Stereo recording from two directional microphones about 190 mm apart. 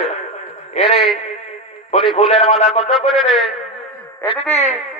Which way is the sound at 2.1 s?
35° left (ahead or behind).